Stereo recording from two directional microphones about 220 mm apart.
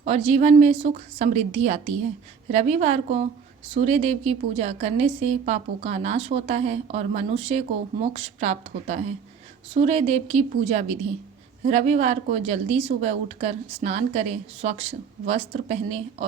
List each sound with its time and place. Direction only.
0.0 s a woman's voice: 30° right (ahead or behind)